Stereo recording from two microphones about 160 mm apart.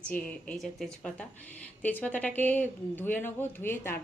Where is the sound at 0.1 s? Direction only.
10° left (ahead or behind).